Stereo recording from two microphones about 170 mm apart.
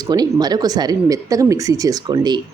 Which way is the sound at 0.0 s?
25° right (ahead or behind).